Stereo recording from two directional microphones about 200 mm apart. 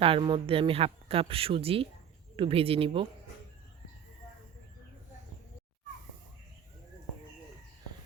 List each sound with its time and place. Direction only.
0.0 s speech: 25° right (ahead or behind)